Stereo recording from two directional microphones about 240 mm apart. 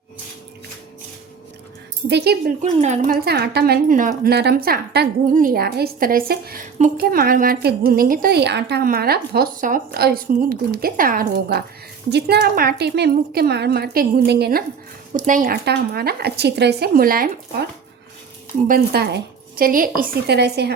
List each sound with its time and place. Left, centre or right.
2.0 s speech: right
18.7 s speech: right